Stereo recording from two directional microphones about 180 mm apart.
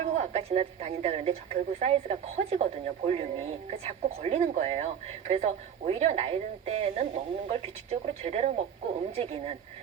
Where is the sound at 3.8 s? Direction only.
35° right (ahead or behind).